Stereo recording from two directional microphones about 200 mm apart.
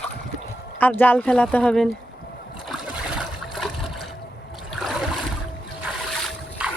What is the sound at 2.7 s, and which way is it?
Water, centre (ahead or behind).